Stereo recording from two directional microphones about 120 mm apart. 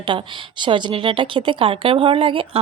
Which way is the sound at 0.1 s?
40° right (ahead or behind).